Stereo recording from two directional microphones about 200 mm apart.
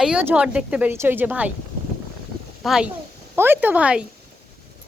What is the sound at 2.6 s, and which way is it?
Speech, centre (ahead or behind).